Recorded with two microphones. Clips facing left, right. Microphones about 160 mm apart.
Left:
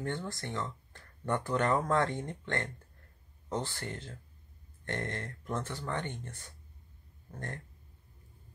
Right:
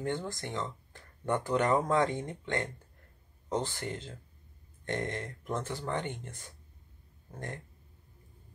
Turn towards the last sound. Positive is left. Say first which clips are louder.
# right 1 dB
turn(degrees=-15)  # may be behind; listen again after turning